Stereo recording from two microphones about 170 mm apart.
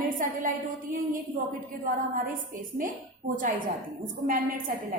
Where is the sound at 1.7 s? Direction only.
55° right (ahead or behind).